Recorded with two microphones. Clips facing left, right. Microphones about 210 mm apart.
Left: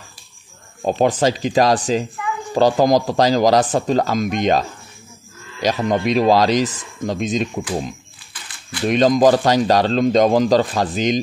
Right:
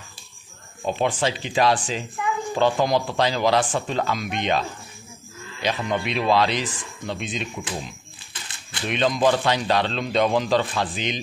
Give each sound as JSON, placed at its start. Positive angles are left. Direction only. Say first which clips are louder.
{"t": 0.8, "sound": "speech", "louder": "left 7 dB", "side_deg": 40}
{"t": 8.8, "sound": "speech", "louder": "left 7 dB", "side_deg": 40}